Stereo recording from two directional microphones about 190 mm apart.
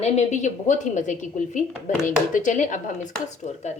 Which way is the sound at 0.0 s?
35° left (ahead or behind).